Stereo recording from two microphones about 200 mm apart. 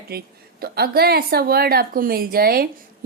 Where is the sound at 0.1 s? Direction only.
50° right (ahead or behind).